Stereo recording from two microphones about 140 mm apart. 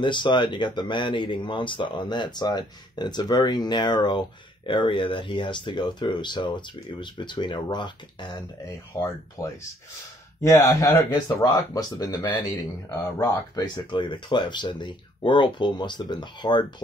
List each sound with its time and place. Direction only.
0.0 s speech: 35° left (ahead or behind)
8.9 s speech: 20° left (ahead or behind)